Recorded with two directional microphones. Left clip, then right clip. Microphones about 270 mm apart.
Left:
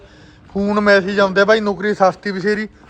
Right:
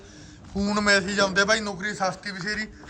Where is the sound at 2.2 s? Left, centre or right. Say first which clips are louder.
Left 11 dB; centre.